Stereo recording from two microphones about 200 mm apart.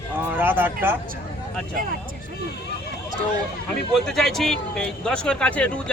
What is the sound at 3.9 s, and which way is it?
Speech, centre (ahead or behind).